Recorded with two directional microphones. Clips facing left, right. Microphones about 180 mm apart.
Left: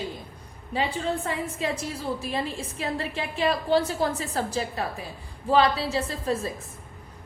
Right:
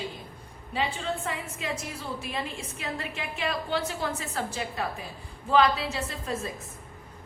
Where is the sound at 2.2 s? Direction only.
35° left (ahead or behind).